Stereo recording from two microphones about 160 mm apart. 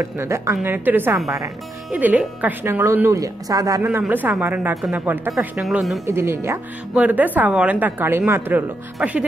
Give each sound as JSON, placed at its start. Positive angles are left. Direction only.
{"t": 0.0, "sound": "speech", "side_deg": -15}
{"t": 6.0, "sound": "speech", "side_deg": -15}